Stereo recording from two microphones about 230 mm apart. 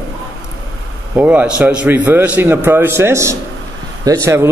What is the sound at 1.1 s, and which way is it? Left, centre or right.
A man's voice, centre.